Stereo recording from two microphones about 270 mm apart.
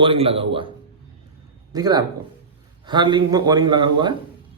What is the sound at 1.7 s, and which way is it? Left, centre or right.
A man's voice, centre.